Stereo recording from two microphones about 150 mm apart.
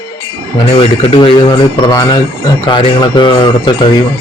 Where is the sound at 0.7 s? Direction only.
40° left (ahead or behind).